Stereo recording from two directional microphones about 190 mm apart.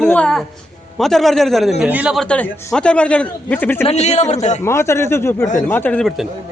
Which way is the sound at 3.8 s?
35° left (ahead or behind).